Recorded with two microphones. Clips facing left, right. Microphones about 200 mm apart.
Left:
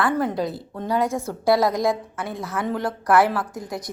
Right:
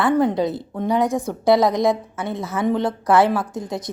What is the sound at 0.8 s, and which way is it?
A woman's voice, 20° right (ahead or behind).